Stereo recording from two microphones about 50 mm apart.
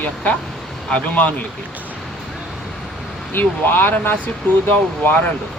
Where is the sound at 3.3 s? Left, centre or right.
Left.